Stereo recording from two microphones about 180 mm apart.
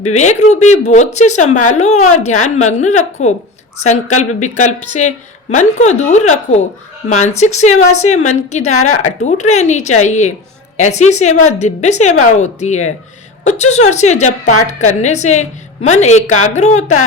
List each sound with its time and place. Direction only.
0.1 s a woman's voice: 40° left (ahead or behind)